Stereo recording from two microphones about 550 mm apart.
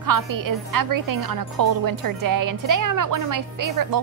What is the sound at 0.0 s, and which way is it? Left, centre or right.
A woman's voice, right.